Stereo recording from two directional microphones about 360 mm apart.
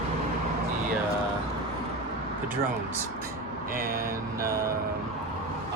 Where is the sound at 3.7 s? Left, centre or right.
Right.